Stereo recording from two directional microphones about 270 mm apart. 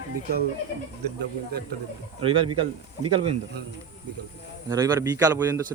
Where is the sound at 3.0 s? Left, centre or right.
Right.